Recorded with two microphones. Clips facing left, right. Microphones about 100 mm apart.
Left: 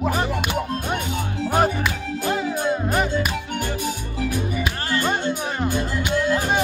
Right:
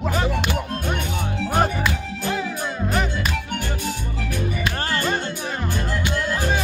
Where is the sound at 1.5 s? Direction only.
5° left (ahead or behind).